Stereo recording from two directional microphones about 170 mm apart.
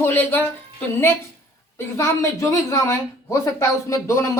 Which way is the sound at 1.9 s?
15° left (ahead or behind).